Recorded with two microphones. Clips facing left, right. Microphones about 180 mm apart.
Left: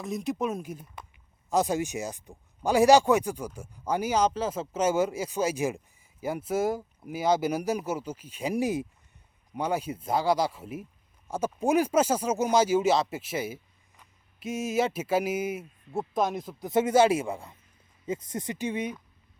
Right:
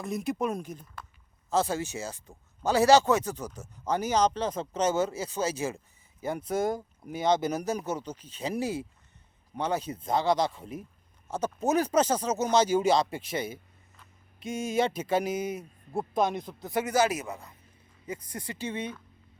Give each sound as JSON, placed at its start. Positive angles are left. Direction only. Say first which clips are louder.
{"t": 0.0, "sound": "speech", "louder": "even", "side_deg": 0}
{"t": 16.6, "sound": "speech", "louder": "left 5 dB", "side_deg": 20}